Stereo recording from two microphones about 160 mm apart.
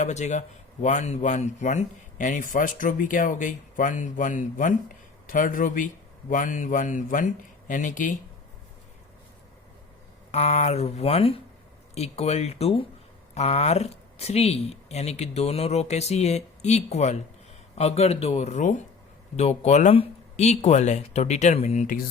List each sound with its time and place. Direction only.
0.0 s speech: 45° left (ahead or behind)
10.3 s speech: 45° left (ahead or behind)